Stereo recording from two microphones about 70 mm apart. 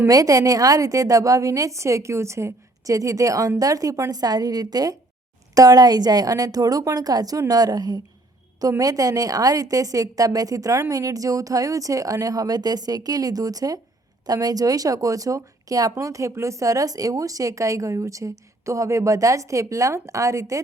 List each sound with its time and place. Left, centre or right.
0.1 s a woman's voice: right